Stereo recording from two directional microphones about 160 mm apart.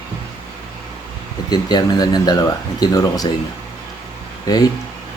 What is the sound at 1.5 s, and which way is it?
Speech, 25° left (ahead or behind).